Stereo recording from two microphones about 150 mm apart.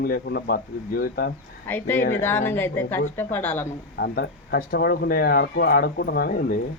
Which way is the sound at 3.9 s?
90° left.